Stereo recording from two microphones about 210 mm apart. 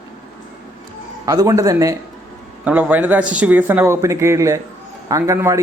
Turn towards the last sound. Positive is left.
turn(degrees=-15)  # may be behind; listen again after turning